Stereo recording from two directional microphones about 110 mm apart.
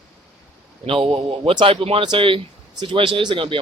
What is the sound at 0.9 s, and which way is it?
Speech, 55° right (ahead or behind).